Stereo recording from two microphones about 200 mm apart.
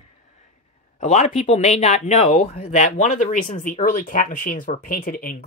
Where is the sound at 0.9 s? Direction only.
35° left (ahead or behind).